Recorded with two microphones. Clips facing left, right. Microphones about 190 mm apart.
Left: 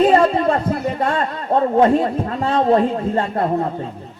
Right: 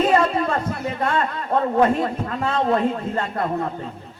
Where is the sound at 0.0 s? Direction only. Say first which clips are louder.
Left 5 dB; 30° left (ahead or behind).